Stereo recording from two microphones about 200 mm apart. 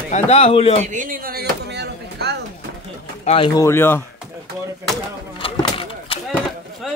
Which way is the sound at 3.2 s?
30° left (ahead or behind).